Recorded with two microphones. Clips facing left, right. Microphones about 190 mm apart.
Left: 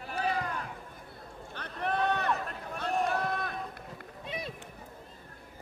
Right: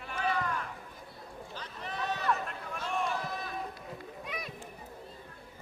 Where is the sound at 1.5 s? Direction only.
60° left (ahead or behind).